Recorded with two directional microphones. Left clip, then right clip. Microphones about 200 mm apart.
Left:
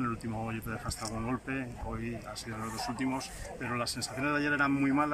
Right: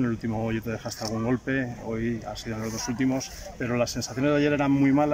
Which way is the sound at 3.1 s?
40° right (ahead or behind).